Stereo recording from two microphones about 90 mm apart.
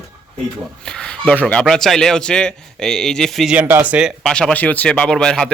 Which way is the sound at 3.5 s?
20° right (ahead or behind).